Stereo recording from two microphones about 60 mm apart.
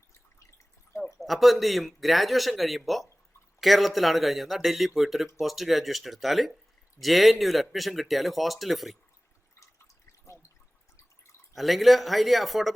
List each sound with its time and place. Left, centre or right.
1.0 s speech: centre
9.6 s drip: left
11.5 s speech: centre